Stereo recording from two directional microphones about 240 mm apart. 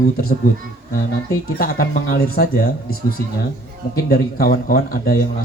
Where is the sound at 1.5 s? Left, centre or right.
Left.